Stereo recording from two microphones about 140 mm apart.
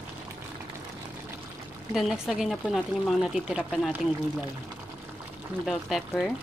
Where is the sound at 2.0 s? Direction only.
Centre (ahead or behind).